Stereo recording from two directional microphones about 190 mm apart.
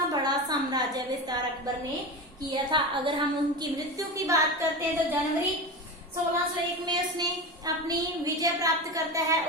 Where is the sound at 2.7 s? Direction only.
25° right (ahead or behind).